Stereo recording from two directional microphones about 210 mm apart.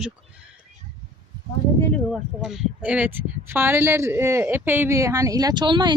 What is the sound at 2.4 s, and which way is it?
Speech, 5° right (ahead or behind).